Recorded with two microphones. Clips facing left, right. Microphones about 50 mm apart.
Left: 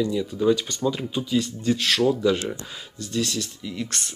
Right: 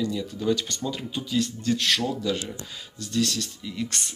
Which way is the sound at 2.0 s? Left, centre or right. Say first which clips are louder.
Left 7 dB; centre.